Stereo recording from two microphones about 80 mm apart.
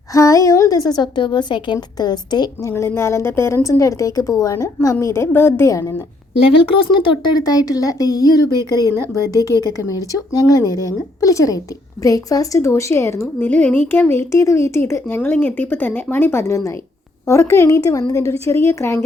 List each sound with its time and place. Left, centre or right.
0.1 s a woman's voice: left
2.0 s a woman's voice: left
2.6 s a woman's voice: left
7.4 s a woman's voice: left
8.5 s speech: right
8.9 s a woman's voice: left